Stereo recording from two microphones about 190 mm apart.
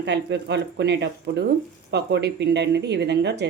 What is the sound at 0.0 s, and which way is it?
A woman's voice, 65° right (ahead or behind).